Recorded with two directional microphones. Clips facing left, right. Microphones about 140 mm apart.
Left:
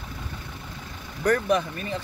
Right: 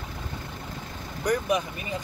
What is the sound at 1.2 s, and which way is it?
Speech, 10° right (ahead or behind).